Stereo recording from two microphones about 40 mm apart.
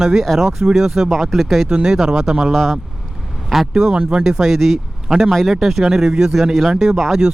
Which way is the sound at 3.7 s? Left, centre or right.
Right.